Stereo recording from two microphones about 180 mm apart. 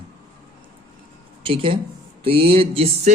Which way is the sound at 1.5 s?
30° right (ahead or behind).